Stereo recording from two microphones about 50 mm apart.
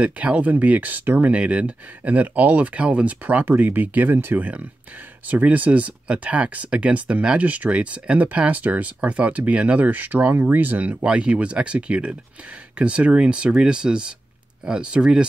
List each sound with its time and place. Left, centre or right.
0.0 s speech: right
1.3 s speech: right
11.1 s speech: right